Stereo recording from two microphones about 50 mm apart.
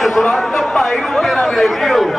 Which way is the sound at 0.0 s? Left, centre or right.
Centre.